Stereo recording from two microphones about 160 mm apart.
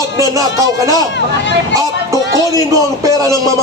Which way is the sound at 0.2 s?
20° right (ahead or behind).